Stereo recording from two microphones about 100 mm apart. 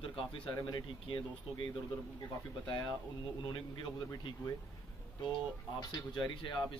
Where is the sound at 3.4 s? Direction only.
55° left (ahead or behind).